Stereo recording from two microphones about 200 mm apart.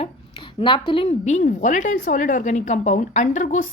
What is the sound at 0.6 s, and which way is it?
A woman's voice, 25° left (ahead or behind).